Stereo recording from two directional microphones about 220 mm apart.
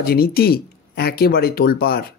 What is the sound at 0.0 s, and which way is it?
Speech, 45° left (ahead or behind).